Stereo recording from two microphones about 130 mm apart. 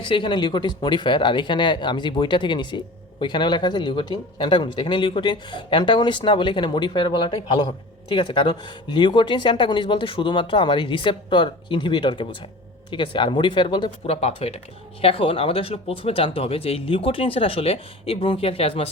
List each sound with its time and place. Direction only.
0.0 s speech: 40° left (ahead or behind)